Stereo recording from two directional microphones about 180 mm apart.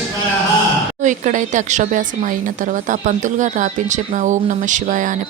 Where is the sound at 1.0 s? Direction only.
45° right (ahead or behind).